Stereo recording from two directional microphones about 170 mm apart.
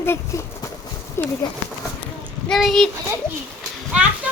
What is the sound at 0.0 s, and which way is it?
Speech, 15° left (ahead or behind).